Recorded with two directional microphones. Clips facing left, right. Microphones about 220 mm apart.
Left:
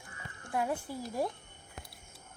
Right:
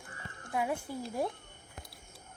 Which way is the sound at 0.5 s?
5° right (ahead or behind).